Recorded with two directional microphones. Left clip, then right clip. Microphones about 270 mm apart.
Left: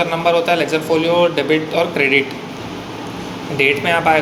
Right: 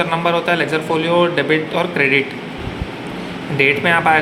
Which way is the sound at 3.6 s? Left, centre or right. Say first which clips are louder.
Right 1 dB; centre.